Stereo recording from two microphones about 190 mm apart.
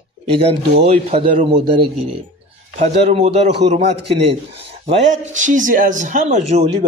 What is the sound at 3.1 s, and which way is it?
Speech, 35° right (ahead or behind).